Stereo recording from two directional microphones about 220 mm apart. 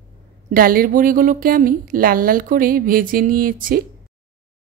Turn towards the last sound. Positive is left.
turn(degrees=-40)  # may be behind; listen again after turning